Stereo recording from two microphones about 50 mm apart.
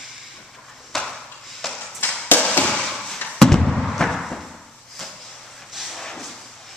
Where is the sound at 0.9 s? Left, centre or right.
Centre.